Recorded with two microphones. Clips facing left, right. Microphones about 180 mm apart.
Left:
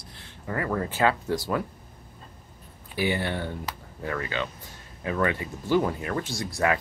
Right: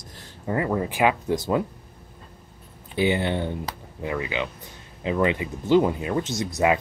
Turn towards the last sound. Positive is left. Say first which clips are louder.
# right 4 dB
turn(degrees=-20)  # may be behind; listen again after turning